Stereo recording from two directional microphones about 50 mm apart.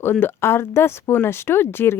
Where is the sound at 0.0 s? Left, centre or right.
Left.